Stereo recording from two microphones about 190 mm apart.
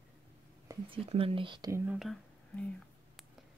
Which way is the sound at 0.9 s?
30° right (ahead or behind).